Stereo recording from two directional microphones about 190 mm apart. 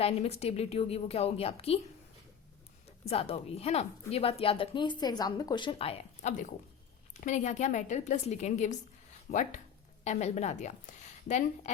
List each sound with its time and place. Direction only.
0.0 s a woman's voice: 35° left (ahead or behind)
3.0 s a woman's voice: 30° left (ahead or behind)